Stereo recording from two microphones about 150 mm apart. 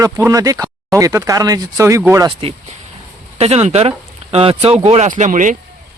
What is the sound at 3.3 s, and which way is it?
Speech, 45° right (ahead or behind).